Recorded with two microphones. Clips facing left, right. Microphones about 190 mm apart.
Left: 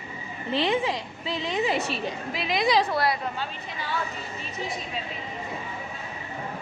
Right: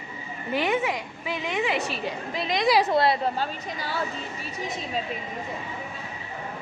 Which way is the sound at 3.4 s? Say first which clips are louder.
Right 4 dB; 40° right (ahead or behind).